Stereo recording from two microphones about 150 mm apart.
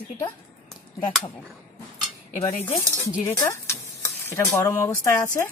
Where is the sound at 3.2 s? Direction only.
20° left (ahead or behind).